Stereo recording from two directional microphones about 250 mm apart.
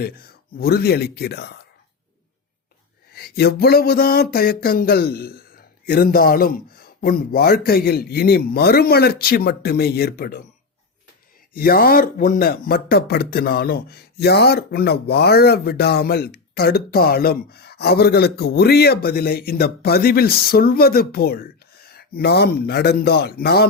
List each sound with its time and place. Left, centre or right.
0.5 s speech: left
3.1 s speech: left
11.5 s speech: left